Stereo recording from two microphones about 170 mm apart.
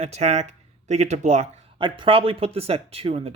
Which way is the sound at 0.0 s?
40° right (ahead or behind).